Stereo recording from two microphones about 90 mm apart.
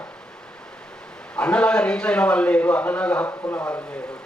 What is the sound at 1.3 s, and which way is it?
A man's voice, 15° left (ahead or behind).